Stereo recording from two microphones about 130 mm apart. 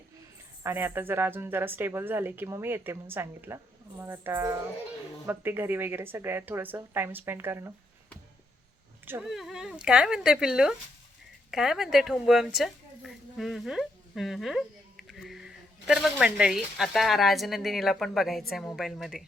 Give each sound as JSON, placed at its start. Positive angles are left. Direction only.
{"t": 0.6, "sound": "a woman's voice", "side_deg": -15}
{"t": 9.2, "sound": "a woman's voice", "side_deg": -5}